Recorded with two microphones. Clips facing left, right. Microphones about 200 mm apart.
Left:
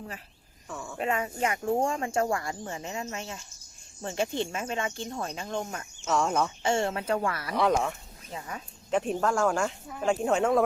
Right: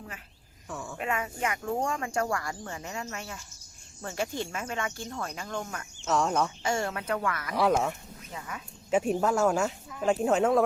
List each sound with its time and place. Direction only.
0.7 s speech: centre (ahead or behind)
0.9 s speech: 30° left (ahead or behind)
6.1 s speech: centre (ahead or behind)
6.6 s speech: 25° left (ahead or behind)
7.5 s speech: 5° right (ahead or behind)
8.3 s speech: 30° left (ahead or behind)
8.9 s speech: 10° right (ahead or behind)